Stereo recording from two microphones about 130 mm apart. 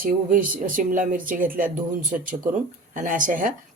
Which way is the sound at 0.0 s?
90° right.